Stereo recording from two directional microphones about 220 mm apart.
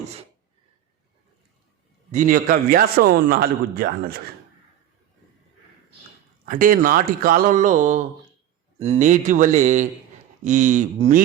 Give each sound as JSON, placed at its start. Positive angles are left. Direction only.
{"t": 2.1, "sound": "a man's voice", "side_deg": -40}
{"t": 6.4, "sound": "a man's voice", "side_deg": -40}